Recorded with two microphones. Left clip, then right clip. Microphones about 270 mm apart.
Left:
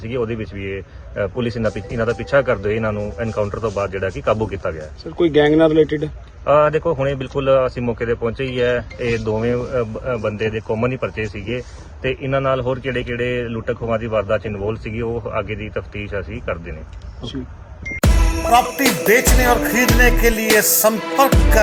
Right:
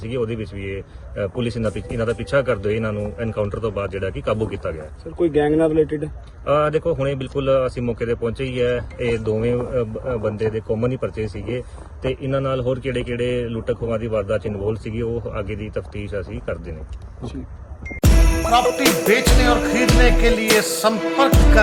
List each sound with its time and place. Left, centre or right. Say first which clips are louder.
0.0 s speech: left 2 dB; centre
5.4 s speech: left 4 dB; left
6.4 s speech: left 4 dB; centre
17.8 s music: left 1 dB; centre